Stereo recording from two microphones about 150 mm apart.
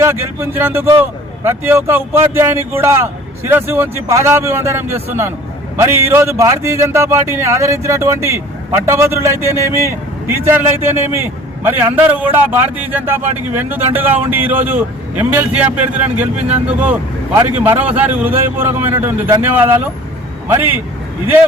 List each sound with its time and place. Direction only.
0.0 s a man's voice: 15° right (ahead or behind)